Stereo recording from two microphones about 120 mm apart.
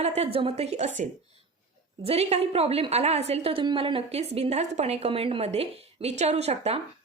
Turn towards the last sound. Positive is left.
turn(degrees=-60)  # may be behind; listen again after turning